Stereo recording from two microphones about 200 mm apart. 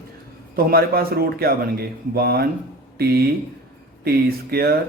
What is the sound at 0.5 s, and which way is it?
Speech, 50° right (ahead or behind).